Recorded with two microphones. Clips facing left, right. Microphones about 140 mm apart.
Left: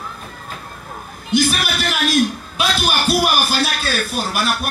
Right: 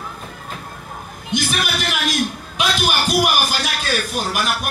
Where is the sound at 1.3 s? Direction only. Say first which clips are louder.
Left 4 dB; 20° right (ahead or behind).